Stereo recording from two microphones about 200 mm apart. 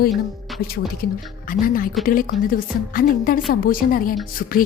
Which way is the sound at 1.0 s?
50° left (ahead or behind).